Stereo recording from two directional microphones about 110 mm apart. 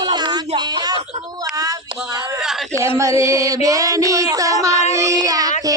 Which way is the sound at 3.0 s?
25° right (ahead or behind).